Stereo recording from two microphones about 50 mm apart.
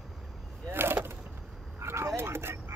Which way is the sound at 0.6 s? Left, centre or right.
Right.